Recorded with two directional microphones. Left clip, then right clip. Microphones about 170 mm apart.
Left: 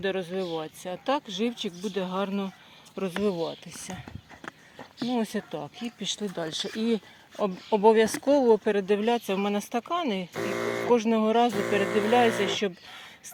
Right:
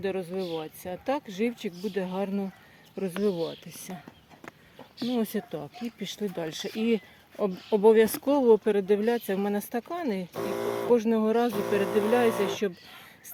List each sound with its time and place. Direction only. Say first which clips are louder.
0.0 s speech: left 2 dB; centre (ahead or behind)
4.4 s a sound: left 4 dB; 30° left (ahead or behind)
5.1 s speech: even; 20° right (ahead or behind); by 10.9 s 5° left (ahead or behind)
10.9 s speech: left 1 dB; 5° right (ahead or behind)